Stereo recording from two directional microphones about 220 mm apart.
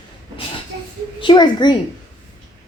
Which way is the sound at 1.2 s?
20° left (ahead or behind).